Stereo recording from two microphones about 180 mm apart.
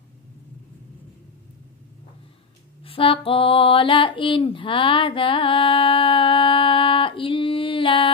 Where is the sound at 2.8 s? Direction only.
30° left (ahead or behind).